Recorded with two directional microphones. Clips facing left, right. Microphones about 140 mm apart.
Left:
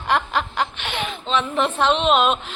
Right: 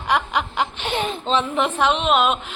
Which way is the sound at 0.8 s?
35° right (ahead or behind).